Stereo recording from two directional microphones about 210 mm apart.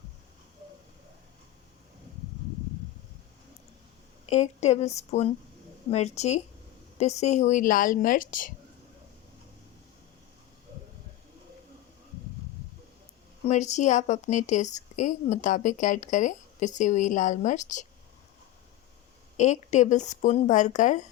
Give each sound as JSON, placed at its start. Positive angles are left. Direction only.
{"t": 4.3, "sound": "a woman's voice", "side_deg": 35}
{"t": 13.4, "sound": "a woman's voice", "side_deg": 35}
{"t": 19.4, "sound": "a woman's voice", "side_deg": 35}